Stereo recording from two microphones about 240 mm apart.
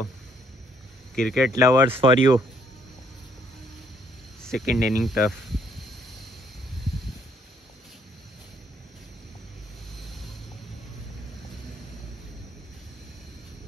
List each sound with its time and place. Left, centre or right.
1.1 s speech: centre
1.5 s speech: centre
4.4 s speech: centre
9.9 s vehicle: centre